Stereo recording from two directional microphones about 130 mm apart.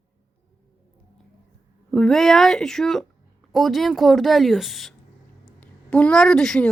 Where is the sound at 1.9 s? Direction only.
5° left (ahead or behind).